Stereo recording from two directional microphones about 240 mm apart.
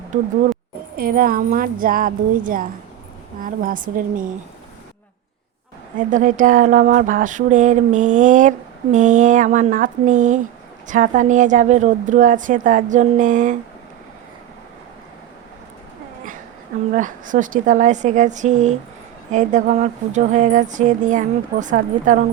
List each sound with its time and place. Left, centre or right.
0.9 s speech: right
6.0 s speech: right
16.9 s speech: right